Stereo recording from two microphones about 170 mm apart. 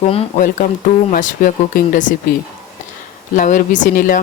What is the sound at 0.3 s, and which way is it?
Speech, 50° left (ahead or behind).